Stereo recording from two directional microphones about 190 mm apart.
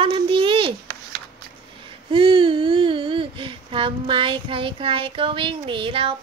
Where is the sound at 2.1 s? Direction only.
30° right (ahead or behind).